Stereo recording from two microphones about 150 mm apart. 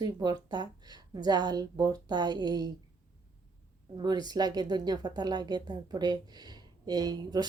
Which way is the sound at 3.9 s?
30° right (ahead or behind).